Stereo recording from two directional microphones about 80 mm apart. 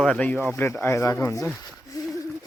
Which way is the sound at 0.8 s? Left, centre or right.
Left.